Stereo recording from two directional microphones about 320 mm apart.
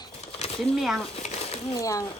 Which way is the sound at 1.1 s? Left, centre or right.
Centre.